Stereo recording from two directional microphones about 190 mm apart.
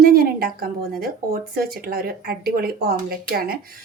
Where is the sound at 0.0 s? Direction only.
55° right (ahead or behind).